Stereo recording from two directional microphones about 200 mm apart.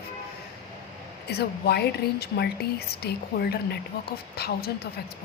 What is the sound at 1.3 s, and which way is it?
A woman's voice, 55° left (ahead or behind).